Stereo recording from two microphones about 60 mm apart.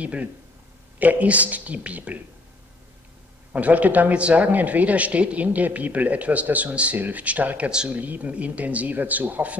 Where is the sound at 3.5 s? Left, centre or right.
Right.